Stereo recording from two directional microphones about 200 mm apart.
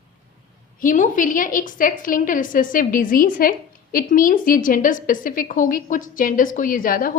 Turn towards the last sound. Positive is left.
turn(degrees=45)  # may be behind; listen again after turning